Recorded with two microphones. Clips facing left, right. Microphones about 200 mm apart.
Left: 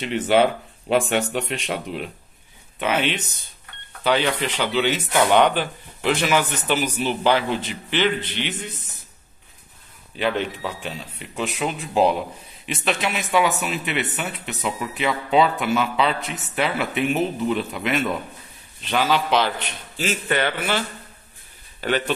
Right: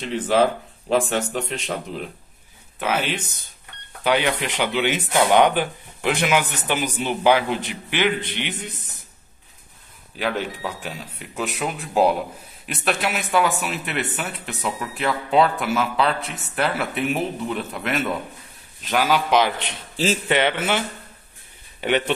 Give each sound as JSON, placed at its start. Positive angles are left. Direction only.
{"t": 0.0, "sound": "speech", "side_deg": 0}
{"t": 2.8, "sound": "speech", "side_deg": -5}
{"t": 10.1, "sound": "speech", "side_deg": -10}
{"t": 19.6, "sound": "speech", "side_deg": -30}
{"t": 21.8, "sound": "speech", "side_deg": -20}